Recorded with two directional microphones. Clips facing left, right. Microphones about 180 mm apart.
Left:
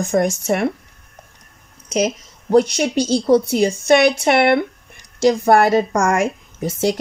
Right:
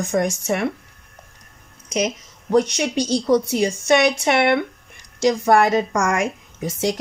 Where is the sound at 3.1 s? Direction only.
35° left (ahead or behind).